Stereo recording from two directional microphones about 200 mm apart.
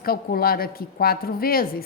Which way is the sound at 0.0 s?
50° left (ahead or behind).